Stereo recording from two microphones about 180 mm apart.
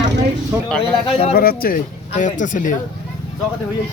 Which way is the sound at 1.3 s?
55° left (ahead or behind).